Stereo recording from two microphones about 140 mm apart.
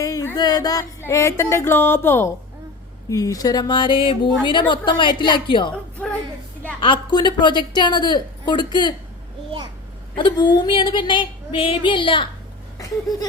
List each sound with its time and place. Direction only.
0.0 s a sound: 20° left (ahead or behind)
3.1 s a woman's voice: 25° left (ahead or behind)
6.8 s a woman's voice: 35° left (ahead or behind)
10.2 s a woman's voice: 35° left (ahead or behind)